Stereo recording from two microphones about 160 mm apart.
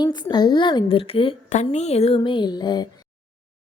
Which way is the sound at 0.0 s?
25° left (ahead or behind).